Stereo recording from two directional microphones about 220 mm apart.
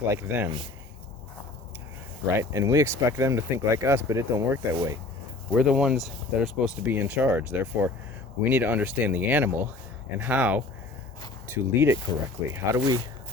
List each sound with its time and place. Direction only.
0.1 s speech: 10° right (ahead or behind)
2.2 s speech: 15° right (ahead or behind)
5.5 s speech: 5° right (ahead or behind)